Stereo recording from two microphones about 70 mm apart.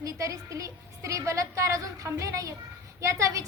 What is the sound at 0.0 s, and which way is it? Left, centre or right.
A woman's voice, right.